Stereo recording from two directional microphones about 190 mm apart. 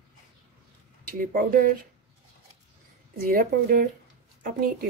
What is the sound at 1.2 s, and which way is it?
Speech, 50° right (ahead or behind).